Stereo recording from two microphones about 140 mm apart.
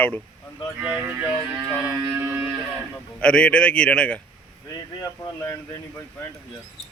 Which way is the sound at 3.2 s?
5° left (ahead or behind).